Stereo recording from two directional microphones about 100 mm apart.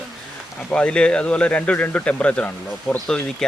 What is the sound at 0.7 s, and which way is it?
Speech, 10° left (ahead or behind).